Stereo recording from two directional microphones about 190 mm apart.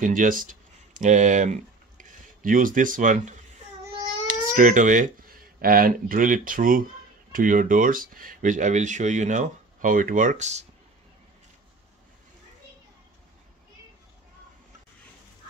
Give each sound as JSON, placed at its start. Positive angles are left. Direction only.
{"t": 0.0, "sound": "speech", "side_deg": -45}